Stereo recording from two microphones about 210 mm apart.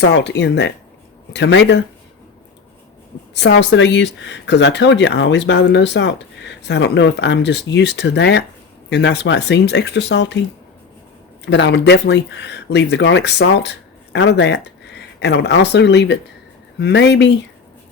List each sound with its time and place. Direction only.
0.0 s speech: 55° left (ahead or behind)
3.4 s speech: 55° left (ahead or behind)
11.4 s speech: 55° left (ahead or behind)